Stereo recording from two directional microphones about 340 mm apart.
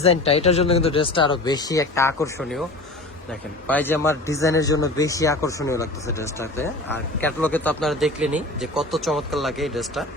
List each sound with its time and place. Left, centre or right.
0.0 s speech: centre
3.7 s a man's voice: centre